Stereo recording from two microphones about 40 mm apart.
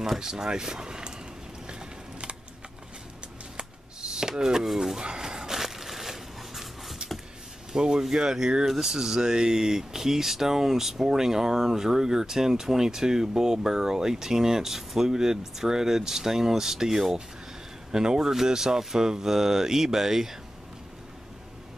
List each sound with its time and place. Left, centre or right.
0.0 s speech: centre
4.1 s a sound: centre
7.7 s speech: centre